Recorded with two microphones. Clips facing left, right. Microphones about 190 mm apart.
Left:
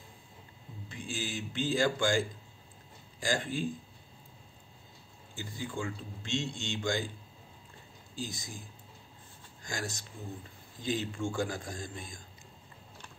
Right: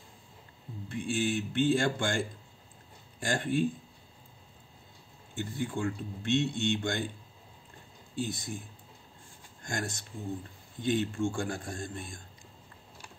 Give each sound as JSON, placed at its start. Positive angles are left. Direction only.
{"t": 0.8, "sound": "a man's voice", "side_deg": -60}
{"t": 5.3, "sound": "a man's voice", "side_deg": -60}
{"t": 8.2, "sound": "a man's voice", "side_deg": -60}